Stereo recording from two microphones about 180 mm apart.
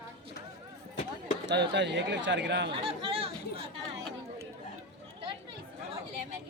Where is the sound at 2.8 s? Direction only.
30° right (ahead or behind).